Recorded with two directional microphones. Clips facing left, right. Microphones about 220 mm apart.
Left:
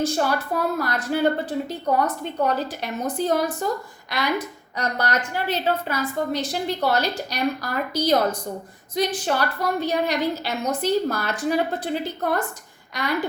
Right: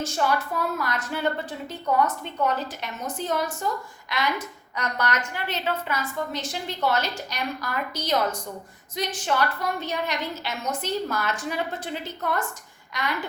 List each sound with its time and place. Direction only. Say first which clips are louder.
0.0 s a woman's voice: left 3 dB; 35° left (ahead or behind)